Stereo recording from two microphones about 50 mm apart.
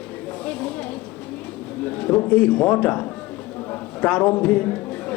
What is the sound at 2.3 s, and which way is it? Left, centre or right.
Speech, centre.